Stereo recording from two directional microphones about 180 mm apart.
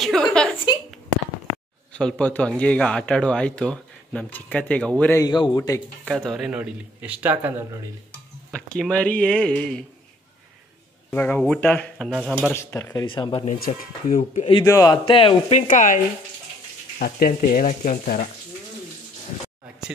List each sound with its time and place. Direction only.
0.0 s a sound: centre (ahead or behind)
2.0 s a man's voice: 5° left (ahead or behind)
5.2 s speech: 25° left (ahead or behind)
6.1 s speech: centre (ahead or behind)
8.5 s speech: 5° left (ahead or behind)
11.1 s speech: 10° left (ahead or behind); by 12.4 s 5° right (ahead or behind)
12.5 s a man's voice: 15° left (ahead or behind)
13.0 s speech: 30° left (ahead or behind)
13.5 s speech: 45° left (ahead or behind)
14.3 s a man's voice: 30° left (ahead or behind)
14.6 s speech: 20° left (ahead or behind)
15.7 s speech: 45° left (ahead or behind)
17.0 s speech: 55° left (ahead or behind)